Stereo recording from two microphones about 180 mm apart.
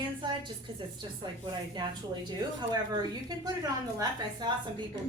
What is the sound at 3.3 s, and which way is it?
A woman's voice, 20° right (ahead or behind).